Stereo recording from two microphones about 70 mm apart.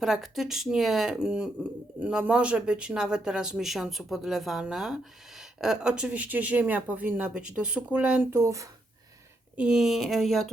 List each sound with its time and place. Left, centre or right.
0.0 s speech: centre
6.1 s speech: right
7.3 s speech: centre
8.2 s speech: right
9.6 s speech: centre